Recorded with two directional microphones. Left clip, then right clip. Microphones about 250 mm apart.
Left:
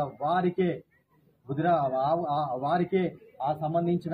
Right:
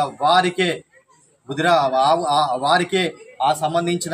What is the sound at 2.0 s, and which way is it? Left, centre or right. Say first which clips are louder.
Speech: right 10 dB; right.